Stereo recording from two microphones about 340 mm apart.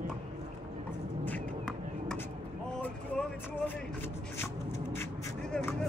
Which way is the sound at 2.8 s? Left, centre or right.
Centre.